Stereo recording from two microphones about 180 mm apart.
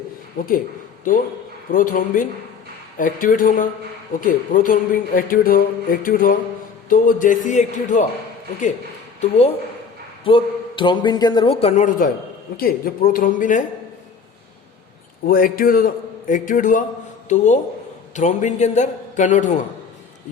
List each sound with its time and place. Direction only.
0.3 s speech: 50° left (ahead or behind)
1.7 s speech: 50° left (ahead or behind)
9.2 s a man's voice: 35° left (ahead or behind)
15.3 s a man's voice: 50° left (ahead or behind)